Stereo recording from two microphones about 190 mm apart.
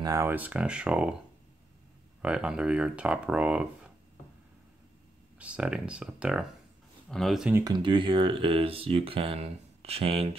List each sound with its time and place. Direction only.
0.0 s speech: 15° right (ahead or behind)
2.2 s speech: 5° right (ahead or behind)
5.4 s speech: 5° right (ahead or behind)
7.5 s speech: 20° right (ahead or behind)